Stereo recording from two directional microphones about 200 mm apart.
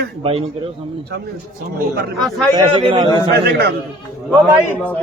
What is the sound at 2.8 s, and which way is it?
Speech, 25° right (ahead or behind).